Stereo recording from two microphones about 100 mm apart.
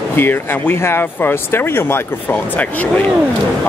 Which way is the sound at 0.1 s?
20° left (ahead or behind).